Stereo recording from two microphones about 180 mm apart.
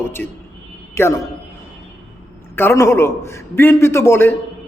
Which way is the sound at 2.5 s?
15° left (ahead or behind).